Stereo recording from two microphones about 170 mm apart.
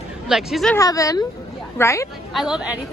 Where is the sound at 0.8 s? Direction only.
20° left (ahead or behind).